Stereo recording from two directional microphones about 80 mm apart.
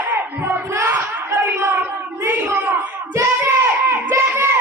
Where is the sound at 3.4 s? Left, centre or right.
Right.